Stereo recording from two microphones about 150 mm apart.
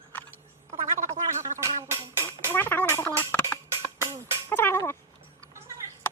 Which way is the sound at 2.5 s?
15° left (ahead or behind).